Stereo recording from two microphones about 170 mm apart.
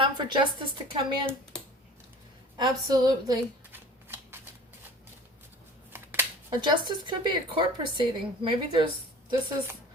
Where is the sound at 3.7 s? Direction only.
10° right (ahead or behind).